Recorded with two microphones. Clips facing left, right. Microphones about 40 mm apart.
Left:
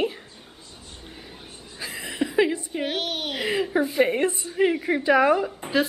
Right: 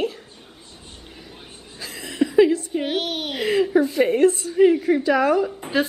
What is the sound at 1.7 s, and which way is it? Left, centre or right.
Chuckle, centre.